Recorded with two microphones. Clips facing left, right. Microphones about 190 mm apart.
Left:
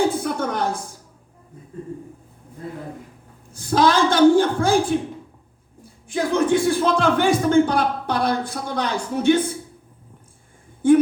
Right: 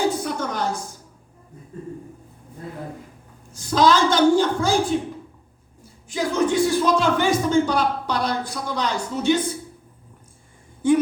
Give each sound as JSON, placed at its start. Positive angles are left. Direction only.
{"t": 0.1, "sound": "a sound", "side_deg": 55}
{"t": 3.5, "sound": "speech", "side_deg": 55}
{"t": 6.1, "sound": "speech", "side_deg": 55}